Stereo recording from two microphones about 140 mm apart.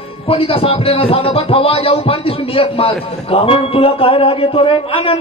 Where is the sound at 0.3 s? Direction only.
40° left (ahead or behind).